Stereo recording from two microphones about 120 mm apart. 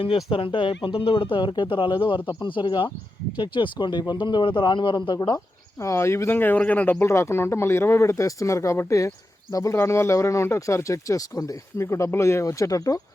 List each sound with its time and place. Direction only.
0.3 s a man's voice: 45° left (ahead or behind)
5.8 s speech: 25° left (ahead or behind)